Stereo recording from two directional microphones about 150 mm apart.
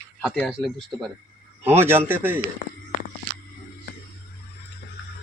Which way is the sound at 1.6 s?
15° right (ahead or behind).